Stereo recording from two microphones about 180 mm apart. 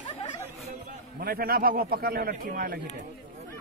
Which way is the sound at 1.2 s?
55° right (ahead or behind).